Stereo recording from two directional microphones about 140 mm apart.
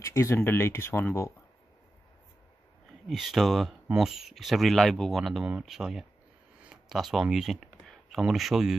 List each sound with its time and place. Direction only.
0.0 s speech: 20° left (ahead or behind)
3.1 s speech: centre (ahead or behind)